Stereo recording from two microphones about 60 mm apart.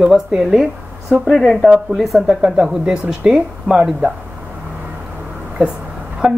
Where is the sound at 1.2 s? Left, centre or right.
Centre.